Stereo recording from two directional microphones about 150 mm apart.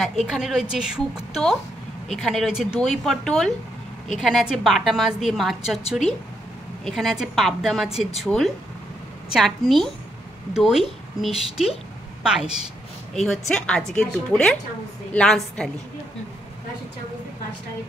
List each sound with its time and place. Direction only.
0.0 s a woman's voice: centre (ahead or behind)
5.9 s speech: 45° left (ahead or behind)
6.8 s a woman's voice: centre (ahead or behind)